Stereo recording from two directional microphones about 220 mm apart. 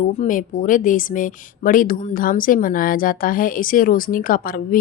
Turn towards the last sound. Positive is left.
turn(degrees=40)  # may be behind; listen again after turning